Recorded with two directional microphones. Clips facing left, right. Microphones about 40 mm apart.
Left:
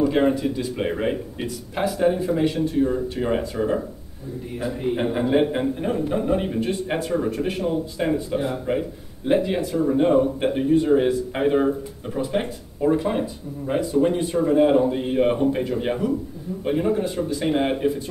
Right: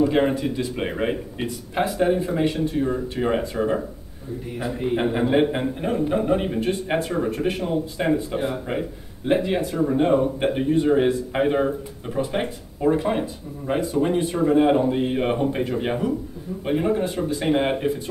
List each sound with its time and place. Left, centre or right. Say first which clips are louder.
0.0 s a sound: even; centre
0.7 s speech: left 1 dB; centre
2.8 s speech: left 3 dB; centre
7.2 s speech: right 1 dB; right
7.6 s a man's voice: even; centre
17.0 s speech: even; right
17.5 s speech: even; centre